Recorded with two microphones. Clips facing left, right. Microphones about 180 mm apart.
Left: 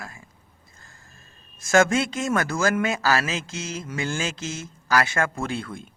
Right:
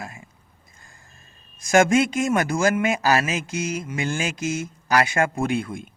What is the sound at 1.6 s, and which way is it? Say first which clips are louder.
Speech: right 2 dB; 15° right (ahead or behind).